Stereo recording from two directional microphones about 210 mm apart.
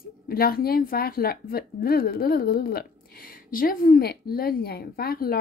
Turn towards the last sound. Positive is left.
turn(degrees=45)  # may be behind; listen again after turning